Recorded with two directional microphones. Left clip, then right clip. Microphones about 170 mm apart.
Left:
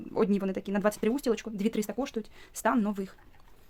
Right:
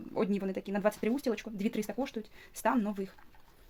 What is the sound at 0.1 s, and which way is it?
Speech, 40° left (ahead or behind).